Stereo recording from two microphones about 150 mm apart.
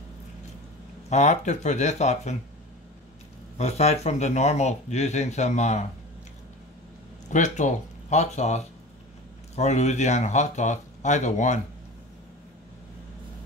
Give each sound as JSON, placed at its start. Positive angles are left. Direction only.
{"t": 1.1, "sound": "speech", "side_deg": 50}
{"t": 3.5, "sound": "speech", "side_deg": 45}
{"t": 7.2, "sound": "speech", "side_deg": 55}